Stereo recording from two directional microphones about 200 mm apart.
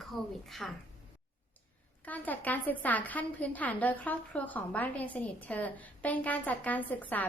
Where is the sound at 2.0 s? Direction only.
10° left (ahead or behind).